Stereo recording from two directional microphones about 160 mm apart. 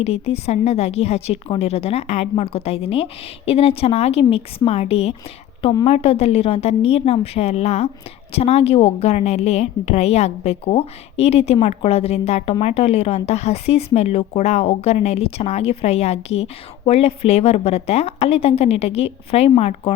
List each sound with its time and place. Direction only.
0.0 s a woman's voice: 40° left (ahead or behind)